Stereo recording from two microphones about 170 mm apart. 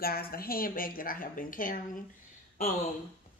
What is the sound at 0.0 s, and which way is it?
A woman's voice, 60° left (ahead or behind).